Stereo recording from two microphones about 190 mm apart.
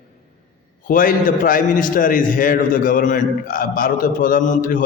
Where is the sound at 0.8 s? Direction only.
45° left (ahead or behind).